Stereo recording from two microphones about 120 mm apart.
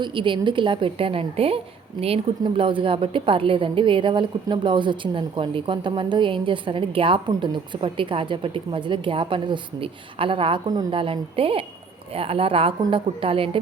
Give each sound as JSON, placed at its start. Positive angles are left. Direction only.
{"t": 0.0, "sound": "a woman's voice", "side_deg": -45}